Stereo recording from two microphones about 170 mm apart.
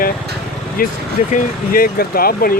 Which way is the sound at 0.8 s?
55° left (ahead or behind).